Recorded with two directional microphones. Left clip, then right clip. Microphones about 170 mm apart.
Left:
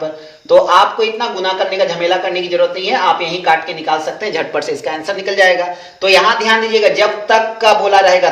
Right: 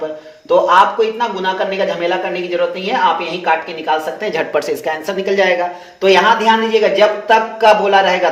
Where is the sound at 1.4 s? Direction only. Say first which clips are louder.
Left 5 dB; 30° right (ahead or behind).